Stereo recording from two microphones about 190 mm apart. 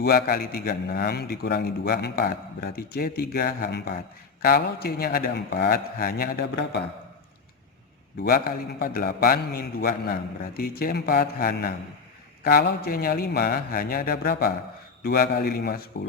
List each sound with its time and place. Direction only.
0.0 s a man's voice: 55° left (ahead or behind)
8.2 s a man's voice: 50° left (ahead or behind)